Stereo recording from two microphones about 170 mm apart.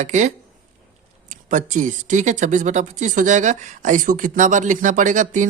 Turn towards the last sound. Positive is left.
turn(degrees=-45)  # may be behind; listen again after turning